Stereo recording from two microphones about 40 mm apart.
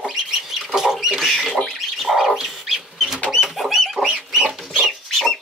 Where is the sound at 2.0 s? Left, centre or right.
Centre.